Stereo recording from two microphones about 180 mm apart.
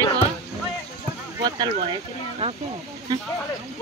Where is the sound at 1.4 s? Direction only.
25° right (ahead or behind).